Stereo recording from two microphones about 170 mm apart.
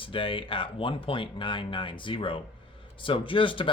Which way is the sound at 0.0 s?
30° left (ahead or behind).